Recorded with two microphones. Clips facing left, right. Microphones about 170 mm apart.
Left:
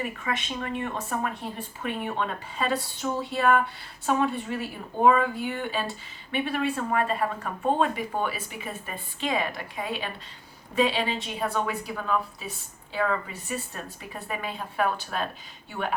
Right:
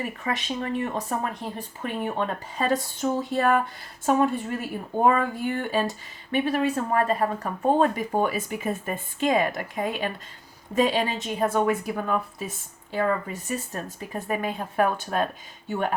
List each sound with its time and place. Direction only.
0.0 s a woman's voice: 40° right (ahead or behind)